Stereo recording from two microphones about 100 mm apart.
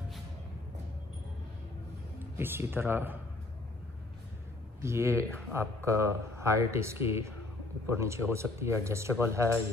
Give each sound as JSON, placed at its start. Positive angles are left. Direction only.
{"t": 2.1, "sound": "speech", "side_deg": -25}
{"t": 4.8, "sound": "speech", "side_deg": -25}